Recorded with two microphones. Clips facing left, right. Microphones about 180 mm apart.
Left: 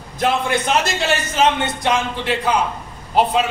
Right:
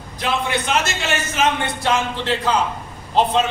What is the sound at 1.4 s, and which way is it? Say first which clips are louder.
Speech: left 3 dB; 35° left (ahead or behind).